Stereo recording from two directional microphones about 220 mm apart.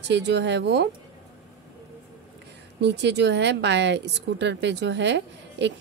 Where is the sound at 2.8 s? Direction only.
50° right (ahead or behind).